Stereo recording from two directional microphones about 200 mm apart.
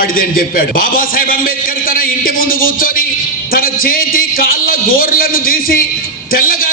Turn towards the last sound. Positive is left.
turn(degrees=45)  # may be behind; listen again after turning